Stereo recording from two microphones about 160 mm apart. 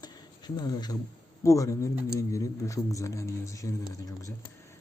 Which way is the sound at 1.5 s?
20° left (ahead or behind).